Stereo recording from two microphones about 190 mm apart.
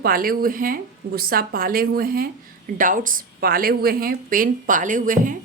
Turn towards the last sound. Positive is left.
turn(degrees=-45)  # may be behind; listen again after turning